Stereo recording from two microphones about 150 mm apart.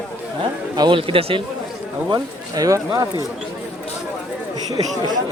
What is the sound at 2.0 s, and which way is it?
Speech, 25° right (ahead or behind).